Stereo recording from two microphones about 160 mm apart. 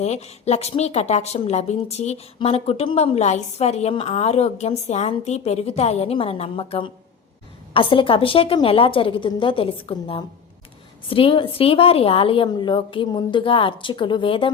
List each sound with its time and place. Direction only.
0.0 s a woman's voice: 45° left (ahead or behind)